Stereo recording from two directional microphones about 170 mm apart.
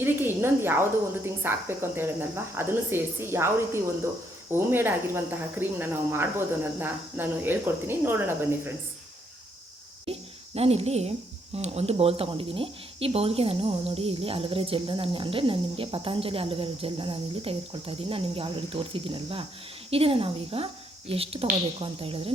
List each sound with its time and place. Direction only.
0.0 s speech: 15° right (ahead or behind)
10.1 s speech: 35° right (ahead or behind)